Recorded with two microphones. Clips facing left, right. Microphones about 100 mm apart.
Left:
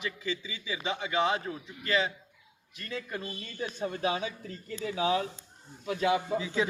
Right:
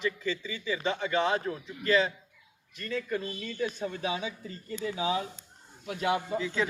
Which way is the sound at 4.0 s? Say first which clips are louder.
Left 2 dB; 60° left (ahead or behind).